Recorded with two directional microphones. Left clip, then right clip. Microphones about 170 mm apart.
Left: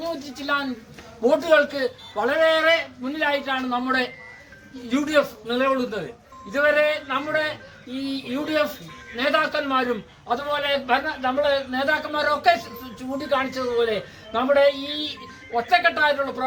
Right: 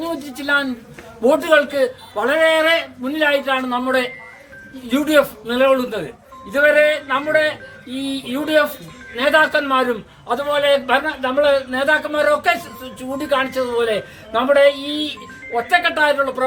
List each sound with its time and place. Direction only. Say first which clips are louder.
0.5 s a man's voice: right 7 dB; 5° right (ahead or behind)